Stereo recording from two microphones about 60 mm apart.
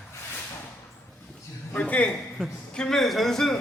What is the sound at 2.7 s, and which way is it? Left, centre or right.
Speech, centre.